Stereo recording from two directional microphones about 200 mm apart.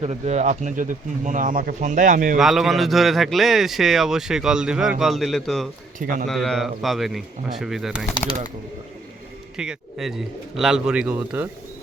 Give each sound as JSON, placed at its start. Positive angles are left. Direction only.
{"t": 0.0, "sound": "speech", "side_deg": -35}
{"t": 2.4, "sound": "a man's voice", "side_deg": 0}
{"t": 6.0, "sound": "speech", "side_deg": -40}
{"t": 6.2, "sound": "a man's voice", "side_deg": 0}
{"t": 9.6, "sound": "a man's voice", "side_deg": 0}